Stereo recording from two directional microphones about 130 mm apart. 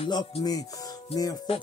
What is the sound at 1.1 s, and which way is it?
Speech, 30° left (ahead or behind).